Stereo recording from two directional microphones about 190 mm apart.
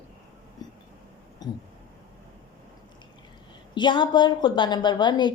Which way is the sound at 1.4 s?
20° left (ahead or behind).